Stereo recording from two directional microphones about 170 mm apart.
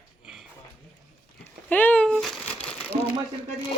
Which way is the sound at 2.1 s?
Centre (ahead or behind).